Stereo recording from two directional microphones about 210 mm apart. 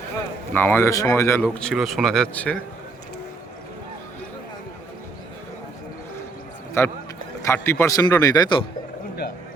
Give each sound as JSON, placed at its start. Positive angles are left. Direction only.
{"t": 0.5, "sound": "a man's voice", "side_deg": 10}
{"t": 1.5, "sound": "speech", "side_deg": 5}
{"t": 6.8, "sound": "a man's voice", "side_deg": 15}